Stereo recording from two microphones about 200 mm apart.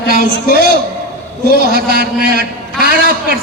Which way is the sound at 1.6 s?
50° right (ahead or behind).